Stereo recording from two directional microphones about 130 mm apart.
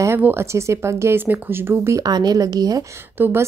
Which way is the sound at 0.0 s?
20° right (ahead or behind).